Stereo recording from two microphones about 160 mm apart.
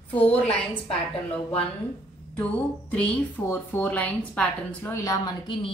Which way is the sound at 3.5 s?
10° left (ahead or behind).